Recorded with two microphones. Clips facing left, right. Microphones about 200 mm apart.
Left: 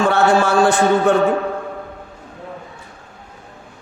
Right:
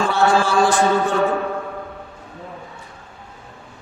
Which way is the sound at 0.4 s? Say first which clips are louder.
Left 2 dB; 60° left (ahead or behind).